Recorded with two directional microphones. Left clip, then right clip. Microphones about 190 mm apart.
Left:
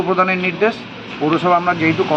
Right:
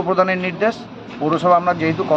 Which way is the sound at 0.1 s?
25° right (ahead or behind).